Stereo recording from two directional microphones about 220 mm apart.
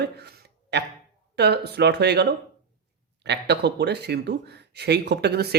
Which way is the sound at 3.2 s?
50° right (ahead or behind).